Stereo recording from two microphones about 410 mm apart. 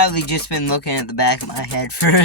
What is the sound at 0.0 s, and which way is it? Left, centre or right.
Speech, left.